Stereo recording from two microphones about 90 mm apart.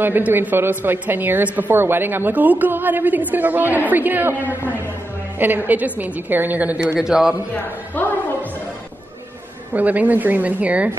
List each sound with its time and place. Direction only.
0.0 s a woman's voice: 20° right (ahead or behind); by 7.3 s 5° right (ahead or behind)
7.5 s a woman's voice: 20° left (ahead or behind)
9.8 s speech: 20° right (ahead or behind)